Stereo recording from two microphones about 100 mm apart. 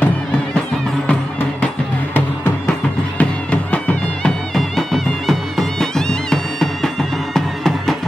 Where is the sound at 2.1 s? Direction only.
20° left (ahead or behind).